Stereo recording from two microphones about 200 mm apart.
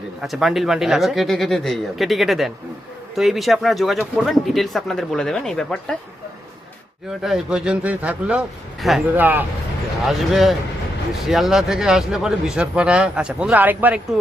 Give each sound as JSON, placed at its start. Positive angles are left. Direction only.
{"t": 0.2, "sound": "speech", "side_deg": 0}
{"t": 7.2, "sound": "speech", "side_deg": 0}